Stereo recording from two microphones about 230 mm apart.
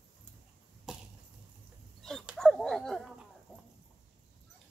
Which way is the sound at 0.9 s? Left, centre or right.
Centre.